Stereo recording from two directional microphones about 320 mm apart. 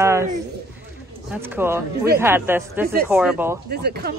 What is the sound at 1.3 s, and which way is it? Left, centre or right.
A woman's voice, centre.